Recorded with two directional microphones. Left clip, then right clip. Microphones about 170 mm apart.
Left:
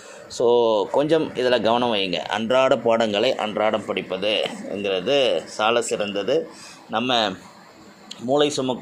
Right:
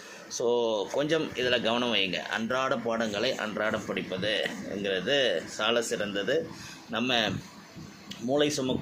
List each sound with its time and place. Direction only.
0.3 s speech: 35° left (ahead or behind)
3.4 s speech: 25° left (ahead or behind)